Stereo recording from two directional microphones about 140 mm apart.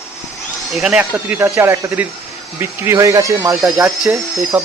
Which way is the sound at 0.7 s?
5° right (ahead or behind).